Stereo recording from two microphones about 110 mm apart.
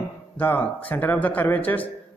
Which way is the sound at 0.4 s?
20° left (ahead or behind).